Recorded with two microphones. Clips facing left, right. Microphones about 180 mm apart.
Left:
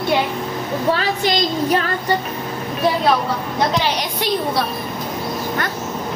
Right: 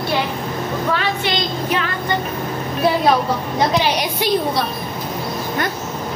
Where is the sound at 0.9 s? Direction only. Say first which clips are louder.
Left 1 dB; 40° left (ahead or behind).